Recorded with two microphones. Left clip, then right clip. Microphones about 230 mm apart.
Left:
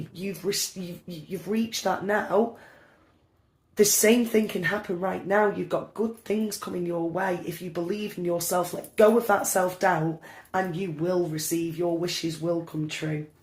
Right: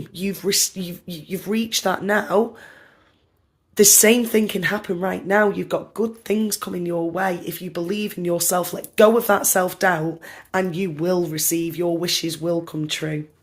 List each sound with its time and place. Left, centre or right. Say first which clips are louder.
0.1 s speech: right 7 dB; right
3.8 s speech: right 6 dB; right